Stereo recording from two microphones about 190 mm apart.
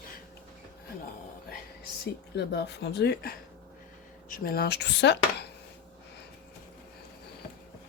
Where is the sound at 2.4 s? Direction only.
60° left (ahead or behind).